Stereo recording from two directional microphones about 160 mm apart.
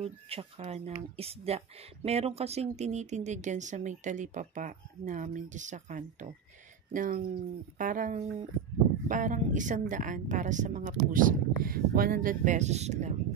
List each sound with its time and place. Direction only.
0.0 s speech: 40° right (ahead or behind)